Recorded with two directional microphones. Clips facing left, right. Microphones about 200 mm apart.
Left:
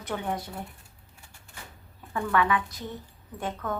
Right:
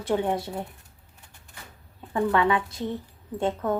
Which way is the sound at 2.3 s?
25° right (ahead or behind).